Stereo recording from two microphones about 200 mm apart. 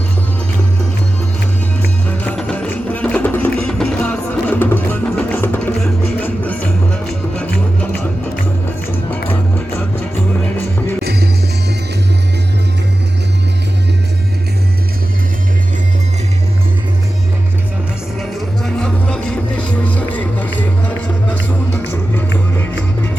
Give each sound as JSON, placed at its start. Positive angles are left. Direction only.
{"t": 1.8, "sound": "music", "side_deg": 10}
{"t": 9.0, "sound": "music", "side_deg": 10}
{"t": 11.0, "sound": "music", "side_deg": -55}
{"t": 18.2, "sound": "music", "side_deg": 0}